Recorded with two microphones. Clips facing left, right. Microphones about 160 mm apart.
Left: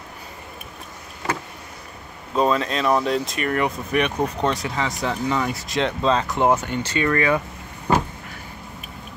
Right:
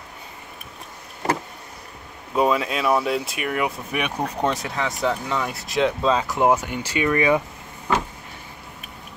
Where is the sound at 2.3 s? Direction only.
10° right (ahead or behind).